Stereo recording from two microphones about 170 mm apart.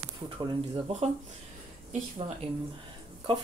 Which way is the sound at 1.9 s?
40° right (ahead or behind).